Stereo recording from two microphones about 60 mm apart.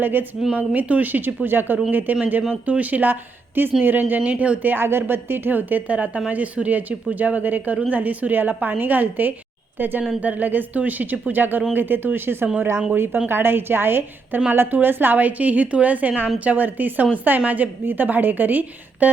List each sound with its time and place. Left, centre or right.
0.0 s a woman's voice: right